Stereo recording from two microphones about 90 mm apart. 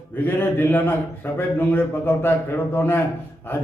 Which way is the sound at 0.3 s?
25° left (ahead or behind).